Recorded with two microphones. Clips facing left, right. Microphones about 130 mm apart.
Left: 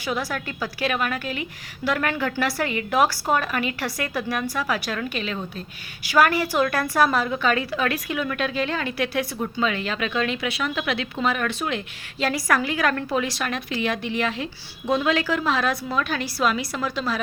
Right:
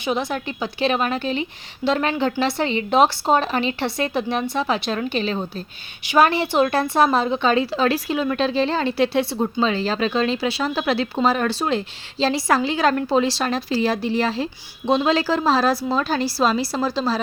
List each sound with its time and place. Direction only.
0.0 s a woman's voice: 20° right (ahead or behind)